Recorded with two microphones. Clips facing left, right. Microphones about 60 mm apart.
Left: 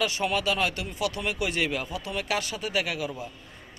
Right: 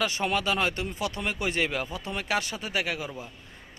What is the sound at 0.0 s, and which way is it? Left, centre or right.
A man's voice, right.